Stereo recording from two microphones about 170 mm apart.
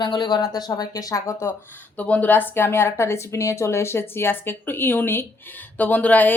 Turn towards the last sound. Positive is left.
turn(degrees=10)  # may be behind; listen again after turning